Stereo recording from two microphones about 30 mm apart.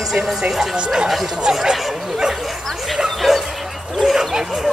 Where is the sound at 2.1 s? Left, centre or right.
Centre.